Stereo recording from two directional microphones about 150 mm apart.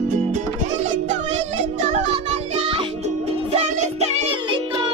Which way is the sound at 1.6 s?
55° right (ahead or behind).